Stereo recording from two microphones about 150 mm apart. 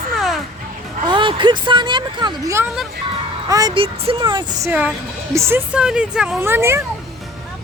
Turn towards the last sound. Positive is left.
turn(degrees=-15)  # may be behind; listen again after turning